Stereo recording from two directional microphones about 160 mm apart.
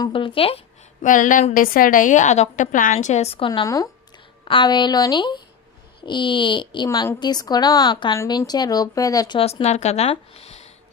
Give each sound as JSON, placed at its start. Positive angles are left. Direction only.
{"t": 0.0, "sound": "speech", "side_deg": 35}
{"t": 1.0, "sound": "a woman's voice", "side_deg": 55}
{"t": 9.4, "sound": "speech", "side_deg": 40}